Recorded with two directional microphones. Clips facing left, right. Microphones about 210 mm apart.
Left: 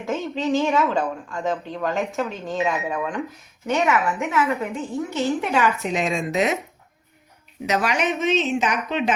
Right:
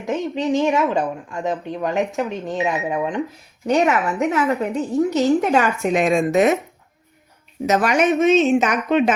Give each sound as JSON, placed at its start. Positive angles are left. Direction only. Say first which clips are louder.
{"t": 0.0, "sound": "speech", "louder": "right 3 dB", "side_deg": -20}
{"t": 3.7, "sound": "a woman's voice", "louder": "right 3 dB", "side_deg": -35}
{"t": 7.7, "sound": "a woman's voice", "louder": "right 5 dB", "side_deg": -50}